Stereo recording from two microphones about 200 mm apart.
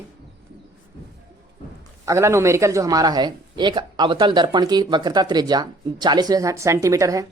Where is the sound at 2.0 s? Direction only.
15° right (ahead or behind).